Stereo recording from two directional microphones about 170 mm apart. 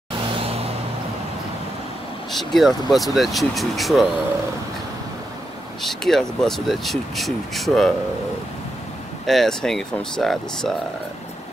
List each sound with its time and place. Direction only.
0.3 s vehicle: 35° right (ahead or behind)
2.3 s speech: centre (ahead or behind)
5.8 s speech: centre (ahead or behind)
9.2 s speech: centre (ahead or behind)